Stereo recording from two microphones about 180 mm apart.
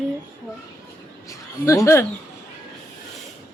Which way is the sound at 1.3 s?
15° left (ahead or behind).